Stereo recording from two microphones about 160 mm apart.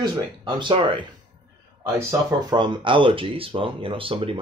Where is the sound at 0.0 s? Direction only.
30° right (ahead or behind).